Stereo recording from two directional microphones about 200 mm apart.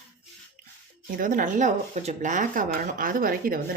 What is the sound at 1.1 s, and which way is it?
A woman's voice, 40° right (ahead or behind).